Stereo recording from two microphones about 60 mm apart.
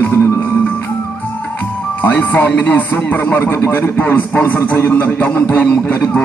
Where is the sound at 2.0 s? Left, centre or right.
Left.